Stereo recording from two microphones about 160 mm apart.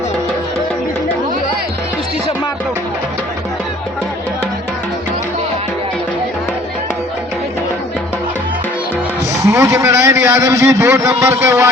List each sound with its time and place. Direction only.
9.4 s a man's voice: 20° right (ahead or behind)